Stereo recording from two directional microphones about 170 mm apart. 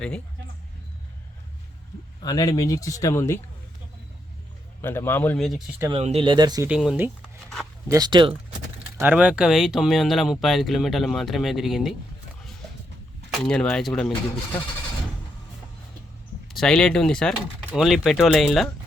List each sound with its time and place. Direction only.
2.2 s speech: 20° left (ahead or behind)
4.8 s speech: 15° left (ahead or behind)
5.9 s speech: 35° right (ahead or behind)
6.7 s speech: 5° right (ahead or behind)
7.9 s speech: 25° right (ahead or behind)
9.0 s speech: 10° right (ahead or behind)
13.3 s speech: 5° left (ahead or behind)
16.5 s speech: centre (ahead or behind)